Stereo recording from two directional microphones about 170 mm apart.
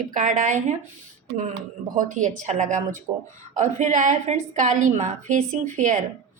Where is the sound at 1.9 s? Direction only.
50° right (ahead or behind).